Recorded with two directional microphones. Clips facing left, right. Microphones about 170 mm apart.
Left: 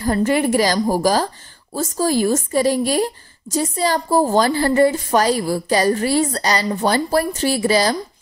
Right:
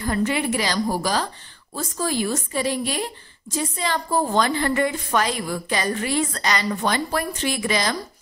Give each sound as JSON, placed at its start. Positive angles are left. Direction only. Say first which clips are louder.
{"t": 0.0, "sound": "a woman's voice", "louder": "left 5 dB", "side_deg": 40}